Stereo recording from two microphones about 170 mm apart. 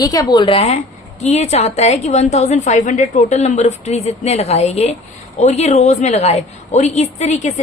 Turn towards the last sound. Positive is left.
turn(degrees=45)  # may be behind; listen again after turning